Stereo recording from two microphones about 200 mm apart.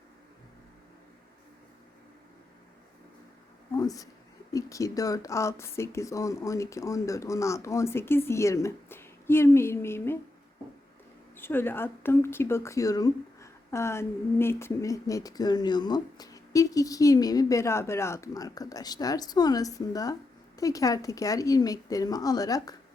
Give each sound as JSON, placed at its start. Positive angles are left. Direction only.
{"t": 3.8, "sound": "speech", "side_deg": 15}
{"t": 11.3, "sound": "speech", "side_deg": 10}